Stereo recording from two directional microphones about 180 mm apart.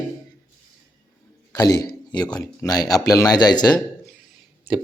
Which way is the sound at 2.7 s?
20° left (ahead or behind).